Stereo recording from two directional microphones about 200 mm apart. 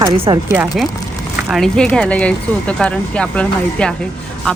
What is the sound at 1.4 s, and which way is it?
Speech, centre (ahead or behind).